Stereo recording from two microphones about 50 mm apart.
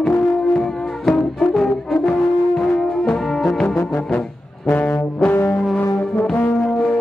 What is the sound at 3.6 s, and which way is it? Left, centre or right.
Music, left.